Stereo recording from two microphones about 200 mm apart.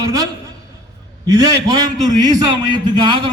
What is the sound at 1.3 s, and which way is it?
A man's voice, 20° right (ahead or behind).